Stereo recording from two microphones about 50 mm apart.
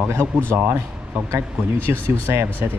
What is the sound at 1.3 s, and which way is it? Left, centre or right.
Speech, right.